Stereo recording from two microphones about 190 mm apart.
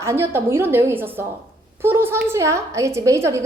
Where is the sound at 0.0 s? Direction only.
15° right (ahead or behind).